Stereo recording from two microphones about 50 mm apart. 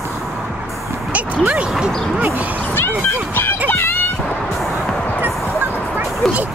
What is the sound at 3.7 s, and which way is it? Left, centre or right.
Music, left.